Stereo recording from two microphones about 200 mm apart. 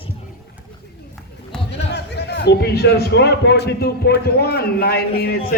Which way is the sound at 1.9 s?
55° left (ahead or behind).